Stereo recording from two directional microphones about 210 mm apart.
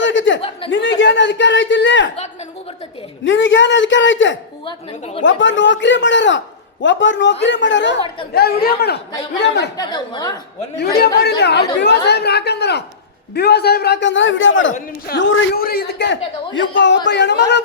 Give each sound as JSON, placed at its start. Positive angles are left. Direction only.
{"t": 0.0, "sound": "chuckle", "side_deg": 60}
{"t": 0.7, "sound": "a man's voice", "side_deg": 60}
{"t": 3.2, "sound": "a man's voice", "side_deg": 65}
{"t": 4.6, "sound": "a woman's voice", "side_deg": 25}
{"t": 5.2, "sound": "a man's voice", "side_deg": 60}
{"t": 9.7, "sound": "a woman's voice", "side_deg": 20}
{"t": 10.8, "sound": "a man's voice", "side_deg": 50}
{"t": 14.7, "sound": "a man's voice", "side_deg": 45}